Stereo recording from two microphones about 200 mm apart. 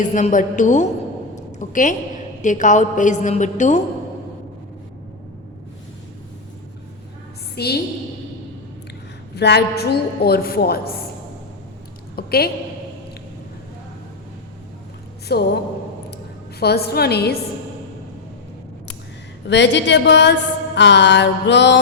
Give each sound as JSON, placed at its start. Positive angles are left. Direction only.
{"t": 0.0, "sound": "a woman's voice", "side_deg": 40}
{"t": 1.4, "sound": "a sound", "side_deg": 40}
{"t": 2.4, "sound": "a woman's voice", "side_deg": 40}
{"t": 7.5, "sound": "a woman's voice", "side_deg": 55}
{"t": 9.3, "sound": "a woman's voice", "side_deg": 55}
{"t": 12.1, "sound": "a woman's voice", "side_deg": 50}
{"t": 15.3, "sound": "a woman's voice", "side_deg": 55}
{"t": 16.6, "sound": "a woman's voice", "side_deg": 55}
{"t": 19.5, "sound": "mantra", "side_deg": 60}